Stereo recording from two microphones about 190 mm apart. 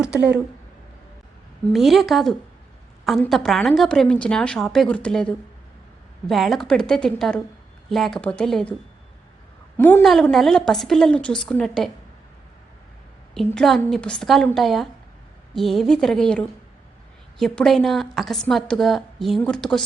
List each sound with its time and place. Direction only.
1.6 s a woman's voice: centre (ahead or behind)
9.7 s a woman's voice: 10° left (ahead or behind)
13.3 s a woman's voice: centre (ahead or behind)